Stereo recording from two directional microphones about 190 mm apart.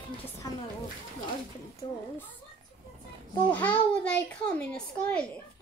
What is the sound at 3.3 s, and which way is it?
A child's voice, 10° left (ahead or behind).